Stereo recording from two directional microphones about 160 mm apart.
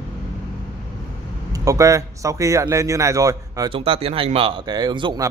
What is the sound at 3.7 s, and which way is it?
Speech, 35° right (ahead or behind).